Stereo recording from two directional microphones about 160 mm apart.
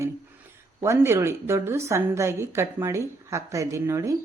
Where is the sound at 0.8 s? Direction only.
15° right (ahead or behind).